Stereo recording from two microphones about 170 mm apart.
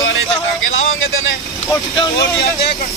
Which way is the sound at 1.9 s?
30° left (ahead or behind).